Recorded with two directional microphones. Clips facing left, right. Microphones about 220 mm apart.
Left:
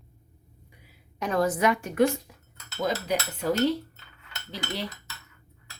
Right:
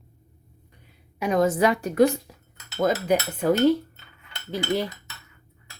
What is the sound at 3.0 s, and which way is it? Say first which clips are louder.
Cutlery: right 6 dB; 50° right (ahead or behind).